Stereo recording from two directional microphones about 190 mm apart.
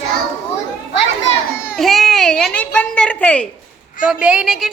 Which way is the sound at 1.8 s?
Centre (ahead or behind).